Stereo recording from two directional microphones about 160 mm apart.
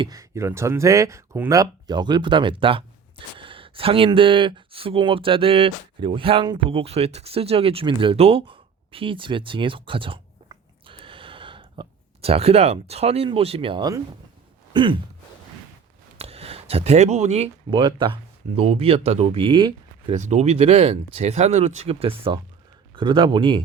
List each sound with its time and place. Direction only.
0.0 s speech: 20° right (ahead or behind)
14.7 s gasp: 30° right (ahead or behind)
16.1 s speech: 40° right (ahead or behind)
20.1 s speech: 45° right (ahead or behind)